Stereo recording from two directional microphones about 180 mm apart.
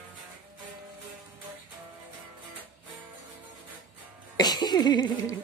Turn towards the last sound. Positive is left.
turn(degrees=25)  # may be behind; listen again after turning